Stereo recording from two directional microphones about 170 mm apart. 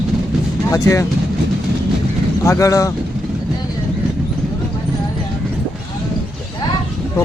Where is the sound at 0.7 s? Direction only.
20° left (ahead or behind).